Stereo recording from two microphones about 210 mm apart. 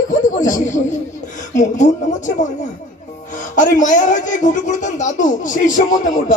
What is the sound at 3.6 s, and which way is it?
Speech, 40° left (ahead or behind).